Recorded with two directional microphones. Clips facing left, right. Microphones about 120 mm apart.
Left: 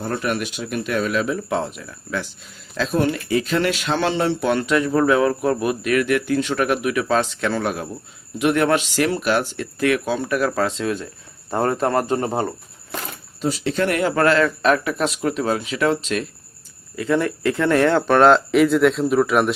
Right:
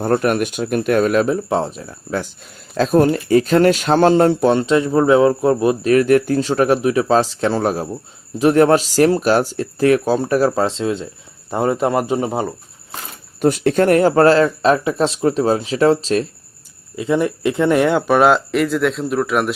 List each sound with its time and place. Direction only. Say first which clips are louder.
0.0 s speech: right 7 dB; 50° right (ahead or behind)
1.4 s speech: right 4 dB; 30° right (ahead or behind)
4.5 s speech: right 4 dB; 25° right (ahead or behind); by 12.5 s 5° right (ahead or behind)
13.4 s speech: right 7 dB; 55° right (ahead or behind); by 16.2 s 35° right (ahead or behind)
16.9 s speech: right 2 dB; 20° right (ahead or behind); by 19.5 s centre (ahead or behind)